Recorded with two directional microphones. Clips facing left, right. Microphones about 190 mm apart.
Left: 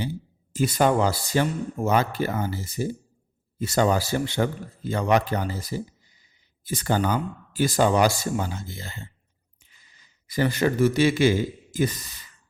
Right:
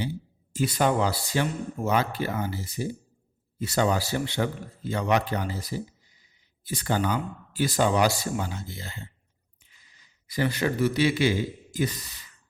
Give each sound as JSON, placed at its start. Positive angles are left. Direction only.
{"t": 0.5, "sound": "speech", "side_deg": 45}
{"t": 6.7, "sound": "speech", "side_deg": 45}
{"t": 10.2, "sound": "speech", "side_deg": 45}